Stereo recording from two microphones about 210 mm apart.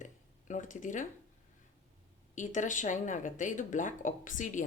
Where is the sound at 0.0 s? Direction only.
35° left (ahead or behind).